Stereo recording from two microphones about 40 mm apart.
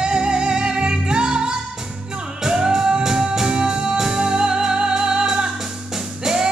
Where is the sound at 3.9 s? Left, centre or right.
Centre.